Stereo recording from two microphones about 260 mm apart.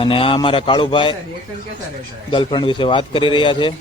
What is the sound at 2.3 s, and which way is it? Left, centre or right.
Speech, centre.